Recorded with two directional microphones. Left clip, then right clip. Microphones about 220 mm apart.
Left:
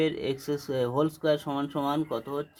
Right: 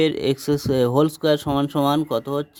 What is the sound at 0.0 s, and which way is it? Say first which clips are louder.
Speech: right 8 dB; 50° right (ahead or behind).